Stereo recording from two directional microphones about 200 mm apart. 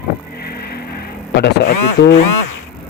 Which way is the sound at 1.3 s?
55° left (ahead or behind).